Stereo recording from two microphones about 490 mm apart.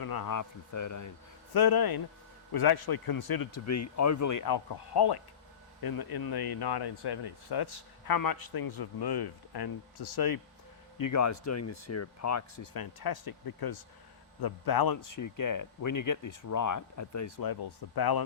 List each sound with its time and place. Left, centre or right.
0.0 s speech: left
1.5 s speech: left